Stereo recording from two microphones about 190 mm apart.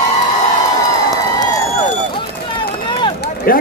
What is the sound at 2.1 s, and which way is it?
Run, 25° left (ahead or behind).